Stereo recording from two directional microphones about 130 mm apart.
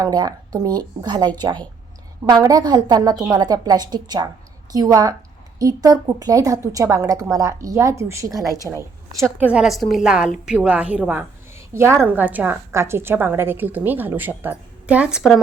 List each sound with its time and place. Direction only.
0.0 s a woman's voice: 30° right (ahead or behind)
9.4 s a woman's voice: 10° right (ahead or behind)